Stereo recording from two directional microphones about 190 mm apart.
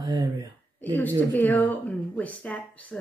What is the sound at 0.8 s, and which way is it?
Speech, 10° left (ahead or behind).